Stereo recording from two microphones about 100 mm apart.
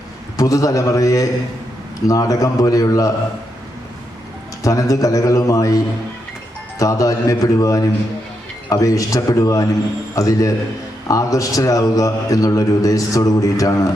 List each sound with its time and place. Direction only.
0.3 s a man's voice: 35° left (ahead or behind)
4.6 s a man's voice: 35° left (ahead or behind)